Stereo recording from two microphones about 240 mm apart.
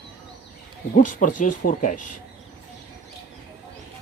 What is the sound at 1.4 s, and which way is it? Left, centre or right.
Speech, left.